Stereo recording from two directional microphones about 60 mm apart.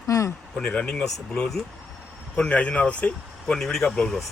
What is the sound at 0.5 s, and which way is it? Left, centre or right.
A man's voice, centre.